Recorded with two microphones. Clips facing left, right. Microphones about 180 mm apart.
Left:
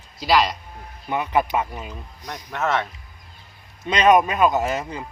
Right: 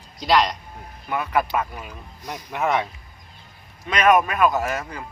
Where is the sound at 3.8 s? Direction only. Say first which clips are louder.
Left 2 dB; 20° left (ahead or behind).